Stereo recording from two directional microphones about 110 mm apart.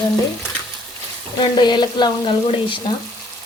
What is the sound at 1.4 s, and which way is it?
Frying, 45° left (ahead or behind).